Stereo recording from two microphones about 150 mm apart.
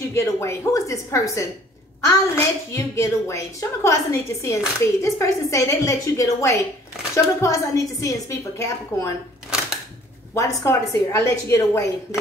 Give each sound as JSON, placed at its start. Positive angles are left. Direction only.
{"t": 0.1, "sound": "a woman's voice", "side_deg": 20}
{"t": 10.3, "sound": "a woman's voice", "side_deg": 20}